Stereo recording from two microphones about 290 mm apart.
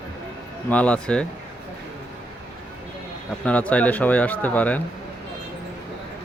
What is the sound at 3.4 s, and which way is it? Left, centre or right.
Speech, centre.